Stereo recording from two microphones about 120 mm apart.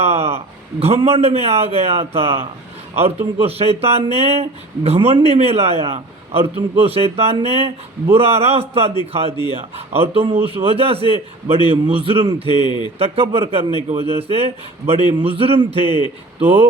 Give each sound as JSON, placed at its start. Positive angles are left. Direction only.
{"t": 0.0, "sound": "a man's voice", "side_deg": -60}
{"t": 12.5, "sound": "speech", "side_deg": 40}
{"t": 13.0, "sound": "a man's voice", "side_deg": -50}